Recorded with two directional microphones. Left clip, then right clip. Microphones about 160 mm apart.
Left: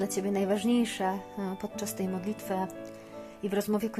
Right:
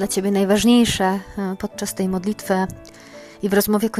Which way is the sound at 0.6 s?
50° right (ahead or behind).